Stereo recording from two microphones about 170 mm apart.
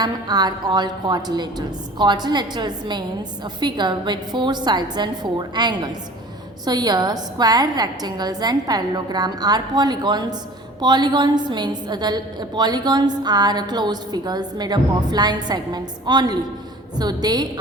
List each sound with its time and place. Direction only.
0.0 s a woman's voice: 25° right (ahead or behind)